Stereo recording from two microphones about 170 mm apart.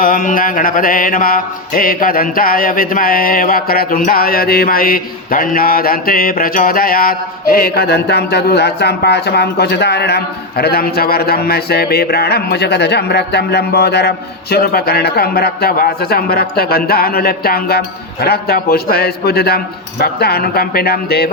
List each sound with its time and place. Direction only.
0.0 s mantra: 50° left (ahead or behind); by 14.1 s 75° left (ahead or behind)
14.5 s speech: 65° left (ahead or behind)